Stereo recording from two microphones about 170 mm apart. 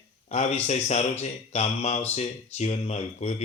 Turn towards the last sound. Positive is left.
turn(degrees=40)  # may be behind; listen again after turning